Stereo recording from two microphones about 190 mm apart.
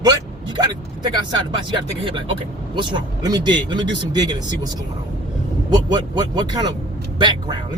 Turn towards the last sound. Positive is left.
turn(degrees=-25)  # may be behind; listen again after turning